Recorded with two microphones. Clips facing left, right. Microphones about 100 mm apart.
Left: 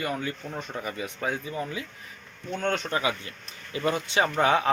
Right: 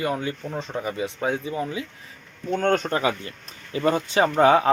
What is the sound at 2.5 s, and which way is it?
Speech, 45° right (ahead or behind).